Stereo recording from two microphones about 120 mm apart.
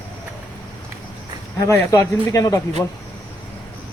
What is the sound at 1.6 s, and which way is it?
A man's voice, 25° left (ahead or behind).